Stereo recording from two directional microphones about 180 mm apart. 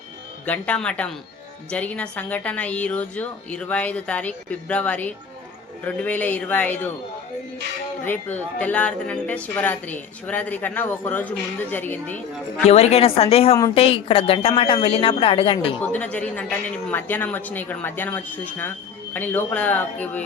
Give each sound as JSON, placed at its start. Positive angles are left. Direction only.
{"t": 0.4, "sound": "a woman's voice", "side_deg": 10}
{"t": 8.0, "sound": "a woman's voice", "side_deg": 10}
{"t": 12.6, "sound": "a woman's voice", "side_deg": 35}
{"t": 15.8, "sound": "a woman's voice", "side_deg": 10}